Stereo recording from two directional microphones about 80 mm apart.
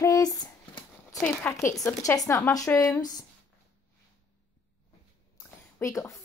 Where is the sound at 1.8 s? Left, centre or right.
Left.